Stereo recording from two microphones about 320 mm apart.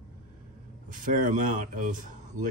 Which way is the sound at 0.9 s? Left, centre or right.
Right.